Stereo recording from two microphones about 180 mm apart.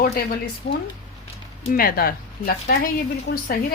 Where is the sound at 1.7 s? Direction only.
55° left (ahead or behind).